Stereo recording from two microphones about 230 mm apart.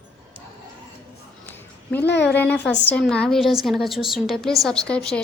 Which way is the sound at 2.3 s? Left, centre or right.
Centre.